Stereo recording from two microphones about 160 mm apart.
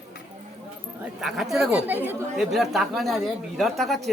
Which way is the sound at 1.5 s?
5° right (ahead or behind).